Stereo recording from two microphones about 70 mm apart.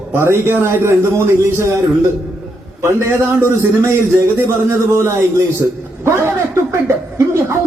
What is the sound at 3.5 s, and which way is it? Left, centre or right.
Speech, right.